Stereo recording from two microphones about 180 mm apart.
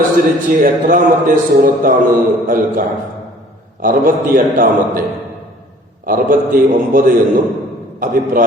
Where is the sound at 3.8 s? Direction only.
50° right (ahead or behind).